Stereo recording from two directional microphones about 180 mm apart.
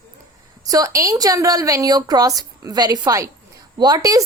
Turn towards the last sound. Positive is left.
turn(degrees=-20)  # may be behind; listen again after turning